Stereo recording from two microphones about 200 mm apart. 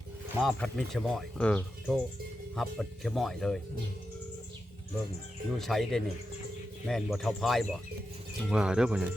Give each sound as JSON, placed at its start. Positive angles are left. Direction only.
{"t": 0.4, "sound": "speech", "side_deg": 0}
{"t": 5.5, "sound": "speech", "side_deg": 0}